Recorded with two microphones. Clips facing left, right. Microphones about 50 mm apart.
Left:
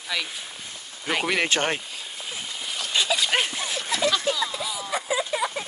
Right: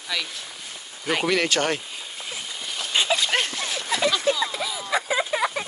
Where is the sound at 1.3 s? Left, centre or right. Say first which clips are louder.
Even; left.